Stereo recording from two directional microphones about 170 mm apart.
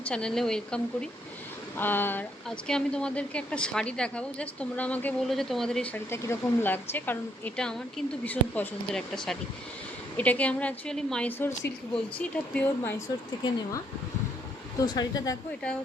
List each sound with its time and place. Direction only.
0.0 s speech: 5° left (ahead or behind)
13.4 s speech: 20° left (ahead or behind)